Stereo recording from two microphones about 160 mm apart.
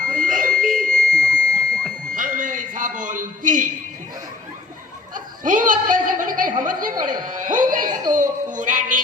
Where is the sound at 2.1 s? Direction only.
55° right (ahead or behind).